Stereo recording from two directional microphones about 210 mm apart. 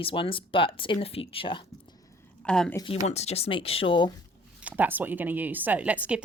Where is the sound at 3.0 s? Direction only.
30° left (ahead or behind).